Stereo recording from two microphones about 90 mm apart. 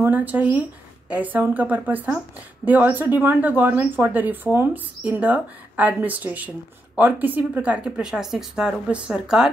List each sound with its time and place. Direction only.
0.0 s speech: 20° right (ahead or behind)